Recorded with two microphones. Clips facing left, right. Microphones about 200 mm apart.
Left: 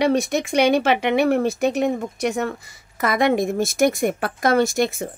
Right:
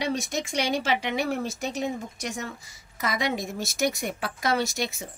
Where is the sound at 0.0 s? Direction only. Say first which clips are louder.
Left 9 dB; 60° left (ahead or behind).